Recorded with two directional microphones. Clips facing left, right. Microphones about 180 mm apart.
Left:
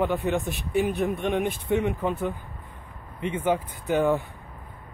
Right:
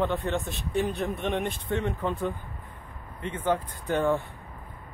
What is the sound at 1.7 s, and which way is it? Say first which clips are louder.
Speech: left 4 dB; 15° left (ahead or behind).